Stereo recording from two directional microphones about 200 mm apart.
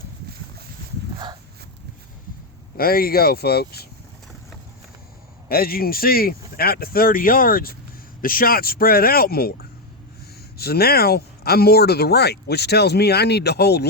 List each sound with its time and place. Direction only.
2.7 s speech: 50° left (ahead or behind)
5.5 s speech: 50° left (ahead or behind)